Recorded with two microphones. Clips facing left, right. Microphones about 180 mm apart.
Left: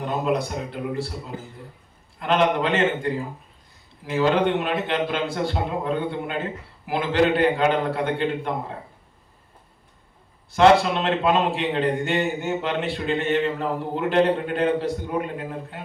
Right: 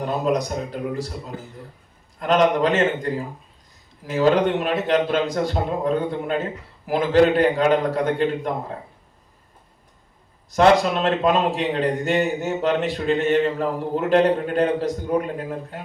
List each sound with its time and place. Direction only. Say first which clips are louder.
0.0 s speech: right 2 dB; 40° right (ahead or behind)
2.1 s a man's voice: right 3 dB; 40° right (ahead or behind)
10.5 s a man's voice: even; 40° right (ahead or behind)